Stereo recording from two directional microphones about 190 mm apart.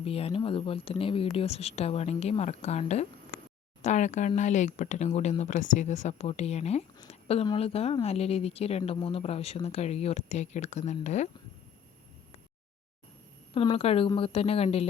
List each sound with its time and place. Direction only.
0.0 s speech: 30° left (ahead or behind)
7.1 s a sound: 30° left (ahead or behind)
7.4 s speech: 30° left (ahead or behind)
13.5 s a woman's voice: 30° left (ahead or behind)